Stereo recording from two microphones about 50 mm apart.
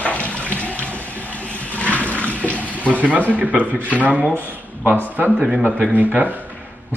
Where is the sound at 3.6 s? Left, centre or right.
Left.